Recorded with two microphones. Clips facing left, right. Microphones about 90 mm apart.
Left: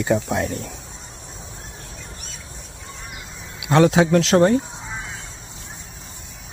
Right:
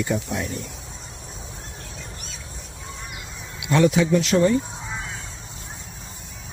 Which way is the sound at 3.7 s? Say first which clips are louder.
Left 3 dB; 90° left.